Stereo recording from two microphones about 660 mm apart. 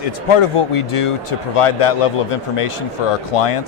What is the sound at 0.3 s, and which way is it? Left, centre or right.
Speech, left.